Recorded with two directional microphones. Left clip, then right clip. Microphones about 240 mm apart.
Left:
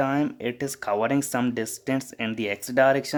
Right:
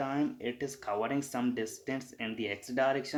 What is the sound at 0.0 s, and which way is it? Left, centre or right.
Speech, left.